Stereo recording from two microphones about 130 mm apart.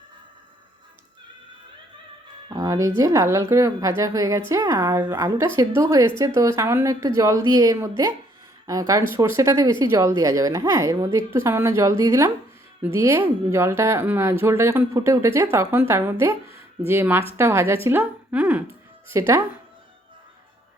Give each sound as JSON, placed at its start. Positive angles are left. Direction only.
{"t": 2.5, "sound": "a woman's voice", "side_deg": -25}
{"t": 19.1, "sound": "a woman's voice", "side_deg": -20}